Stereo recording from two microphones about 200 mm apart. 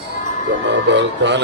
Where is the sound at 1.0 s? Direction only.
60° right (ahead or behind).